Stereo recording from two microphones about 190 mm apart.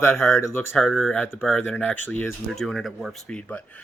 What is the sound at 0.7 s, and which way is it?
Speech, centre (ahead or behind).